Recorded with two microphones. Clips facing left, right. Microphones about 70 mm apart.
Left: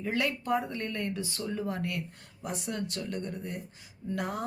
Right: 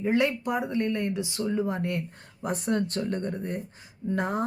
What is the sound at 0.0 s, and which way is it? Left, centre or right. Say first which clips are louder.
Speech: right 6 dB; right.